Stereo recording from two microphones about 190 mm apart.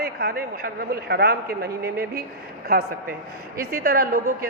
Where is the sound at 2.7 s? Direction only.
50° right (ahead or behind).